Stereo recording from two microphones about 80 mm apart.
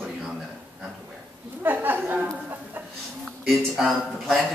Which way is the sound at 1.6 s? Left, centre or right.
Right.